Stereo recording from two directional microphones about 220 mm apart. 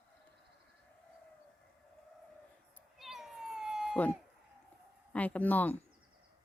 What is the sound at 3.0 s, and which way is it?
Cat, centre (ahead or behind).